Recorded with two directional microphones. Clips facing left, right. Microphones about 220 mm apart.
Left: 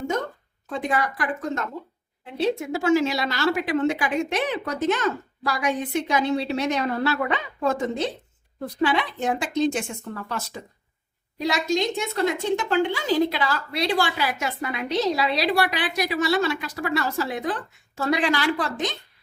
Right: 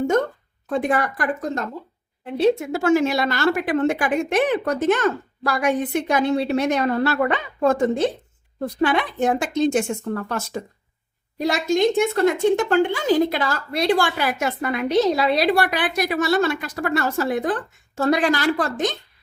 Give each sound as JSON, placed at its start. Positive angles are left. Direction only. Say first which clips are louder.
{"t": 0.7, "sound": "speech", "louder": "right 4 dB", "side_deg": -50}
{"t": 2.7, "sound": "speech", "louder": "right 3 dB", "side_deg": -50}